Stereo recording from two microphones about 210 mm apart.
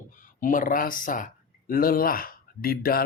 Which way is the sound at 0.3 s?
40° left (ahead or behind).